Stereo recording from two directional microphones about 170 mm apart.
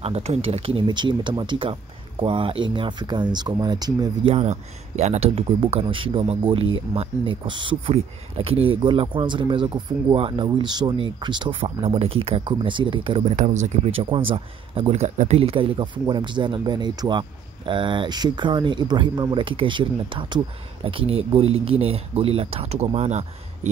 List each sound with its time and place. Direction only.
0.0 s speech: 40° right (ahead or behind)
4.3 s speech: 40° right (ahead or behind)
13.4 s speech: 45° right (ahead or behind)